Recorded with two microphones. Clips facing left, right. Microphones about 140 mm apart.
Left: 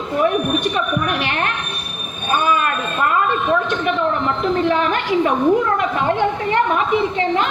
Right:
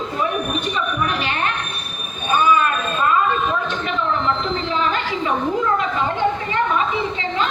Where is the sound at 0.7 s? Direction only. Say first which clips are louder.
Left 2 dB; 60° left (ahead or behind).